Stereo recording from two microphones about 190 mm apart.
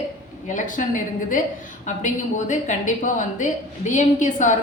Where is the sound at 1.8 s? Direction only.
40° left (ahead or behind).